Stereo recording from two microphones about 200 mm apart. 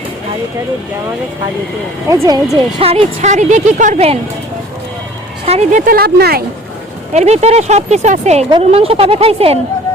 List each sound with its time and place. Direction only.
2.0 s speech: 15° right (ahead or behind)
2.7 s speech: 30° right (ahead or behind)
5.5 s speech: 35° right (ahead or behind); by 6.4 s 50° right (ahead or behind)
7.1 s a woman's voice: 35° right (ahead or behind)